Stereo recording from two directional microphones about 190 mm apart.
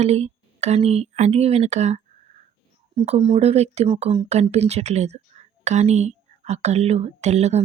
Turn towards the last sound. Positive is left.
turn(degrees=-35)  # may be behind; listen again after turning